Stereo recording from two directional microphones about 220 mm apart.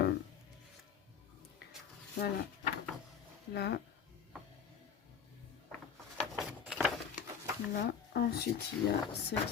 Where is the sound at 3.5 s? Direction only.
50° left (ahead or behind).